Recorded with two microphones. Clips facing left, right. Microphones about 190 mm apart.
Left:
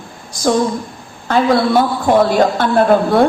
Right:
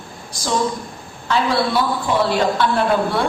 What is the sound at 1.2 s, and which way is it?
A man's voice, 50° left (ahead or behind).